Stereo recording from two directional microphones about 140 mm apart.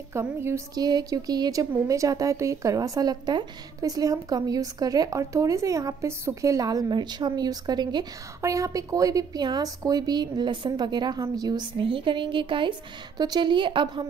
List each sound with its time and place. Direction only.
0.1 s speech: 15° right (ahead or behind)
0.8 s a woman's voice: 30° right (ahead or behind)